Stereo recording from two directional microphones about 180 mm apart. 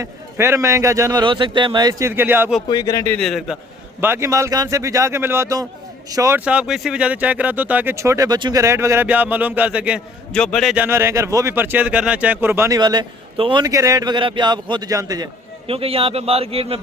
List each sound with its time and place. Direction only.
0.0 s speech: 15° right (ahead or behind)
2.6 s a man's voice: 20° left (ahead or behind)
3.2 s a man's voice: centre (ahead or behind)
4.0 s speech: 15° right (ahead or behind)
10.3 s a man's voice: 5° left (ahead or behind)
10.8 s speech: 15° right (ahead or behind); by 16.8 s 35° right (ahead or behind)